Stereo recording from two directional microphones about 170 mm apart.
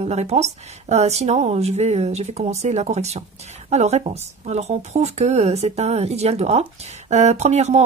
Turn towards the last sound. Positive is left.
turn(degrees=-40)  # may be behind; listen again after turning